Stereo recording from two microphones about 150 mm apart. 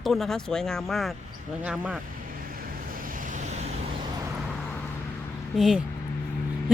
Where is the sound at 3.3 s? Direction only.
50° right (ahead or behind).